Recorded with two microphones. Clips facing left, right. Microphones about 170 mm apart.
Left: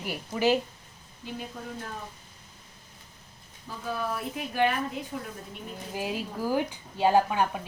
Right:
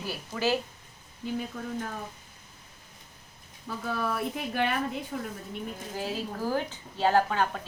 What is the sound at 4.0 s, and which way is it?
Speech, 55° right (ahead or behind).